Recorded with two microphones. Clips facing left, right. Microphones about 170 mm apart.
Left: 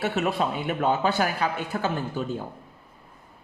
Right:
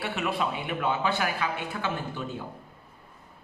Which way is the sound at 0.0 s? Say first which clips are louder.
Left 4 dB; 40° left (ahead or behind).